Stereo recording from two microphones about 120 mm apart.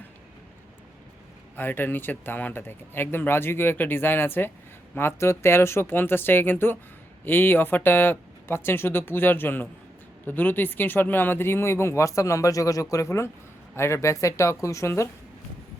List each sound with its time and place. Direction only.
1.5 s speech: 15° left (ahead or behind)